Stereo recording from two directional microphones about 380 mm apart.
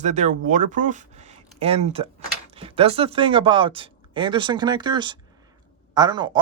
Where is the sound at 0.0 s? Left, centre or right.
Centre.